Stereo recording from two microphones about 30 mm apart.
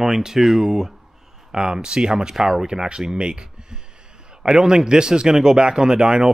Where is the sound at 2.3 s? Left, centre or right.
Centre.